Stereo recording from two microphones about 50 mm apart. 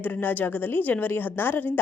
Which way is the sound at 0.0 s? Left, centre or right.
Left.